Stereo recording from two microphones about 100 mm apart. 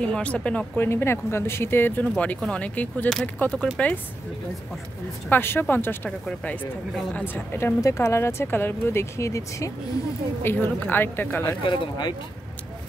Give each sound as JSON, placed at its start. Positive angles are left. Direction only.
{"t": 0.0, "sound": "speech", "side_deg": 10}
{"t": 0.8, "sound": "a woman's voice", "side_deg": 25}
{"t": 5.3, "sound": "a woman's voice", "side_deg": 20}
{"t": 11.6, "sound": "speech", "side_deg": 50}